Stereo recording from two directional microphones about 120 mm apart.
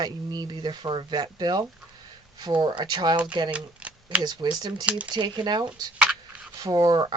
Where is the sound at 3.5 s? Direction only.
10° right (ahead or behind).